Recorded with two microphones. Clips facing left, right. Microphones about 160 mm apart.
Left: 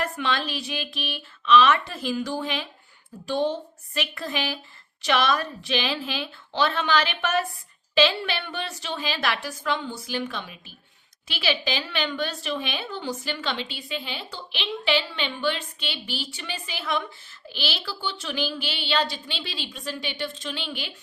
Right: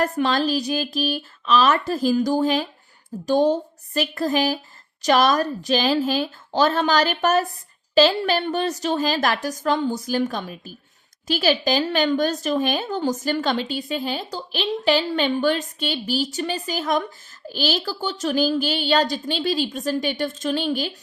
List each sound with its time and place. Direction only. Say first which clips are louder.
0.0 s a woman's voice: right 7 dB; 40° right (ahead or behind)